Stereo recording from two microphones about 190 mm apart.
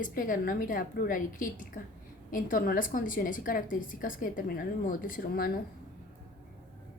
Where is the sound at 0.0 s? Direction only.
45° left (ahead or behind).